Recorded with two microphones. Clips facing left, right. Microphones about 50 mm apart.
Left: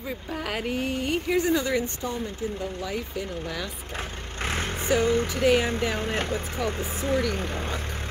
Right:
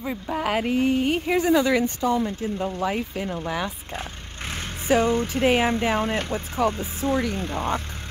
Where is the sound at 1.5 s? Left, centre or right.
Right.